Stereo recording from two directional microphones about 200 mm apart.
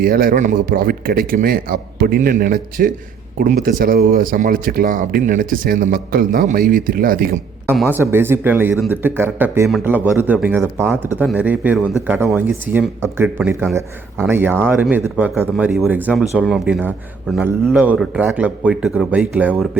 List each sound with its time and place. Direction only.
0.0 s speech: 45° right (ahead or behind)
7.8 s a man's voice: 10° right (ahead or behind)